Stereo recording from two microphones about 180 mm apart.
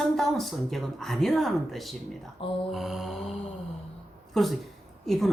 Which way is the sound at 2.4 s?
30° left (ahead or behind).